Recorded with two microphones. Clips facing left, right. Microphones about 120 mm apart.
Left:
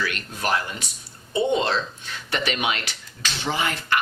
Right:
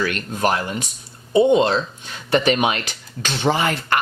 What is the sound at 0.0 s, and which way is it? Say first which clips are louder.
Speech: right 7 dB; 45° right (ahead or behind).